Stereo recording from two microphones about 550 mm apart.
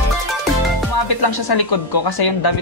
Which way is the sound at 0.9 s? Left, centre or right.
Left.